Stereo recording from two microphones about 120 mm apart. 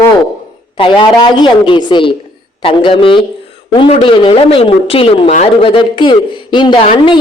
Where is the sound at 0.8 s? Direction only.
45° left (ahead or behind).